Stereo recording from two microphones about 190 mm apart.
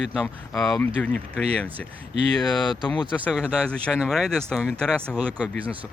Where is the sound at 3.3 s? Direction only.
5° left (ahead or behind).